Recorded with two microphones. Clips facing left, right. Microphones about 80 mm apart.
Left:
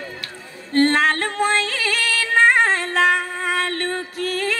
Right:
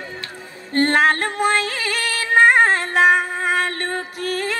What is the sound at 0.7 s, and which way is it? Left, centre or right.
Music, right.